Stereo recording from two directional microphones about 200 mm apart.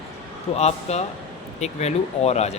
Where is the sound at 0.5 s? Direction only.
35° left (ahead or behind).